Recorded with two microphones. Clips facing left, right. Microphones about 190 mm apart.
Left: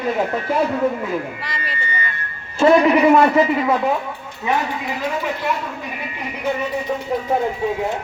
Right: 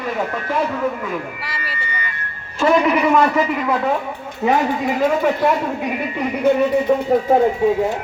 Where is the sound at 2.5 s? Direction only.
30° left (ahead or behind).